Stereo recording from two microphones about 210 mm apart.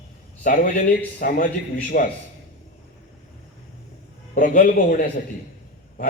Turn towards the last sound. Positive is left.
turn(degrees=40)  # may be behind; listen again after turning